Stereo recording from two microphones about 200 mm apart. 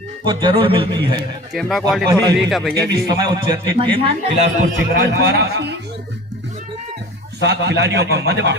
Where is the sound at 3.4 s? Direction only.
25° right (ahead or behind).